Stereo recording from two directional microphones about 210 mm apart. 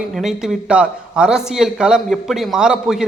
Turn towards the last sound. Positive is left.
turn(degrees=-5)  # may be behind; listen again after turning